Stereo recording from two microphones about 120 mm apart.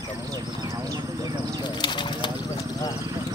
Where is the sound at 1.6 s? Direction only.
40° left (ahead or behind).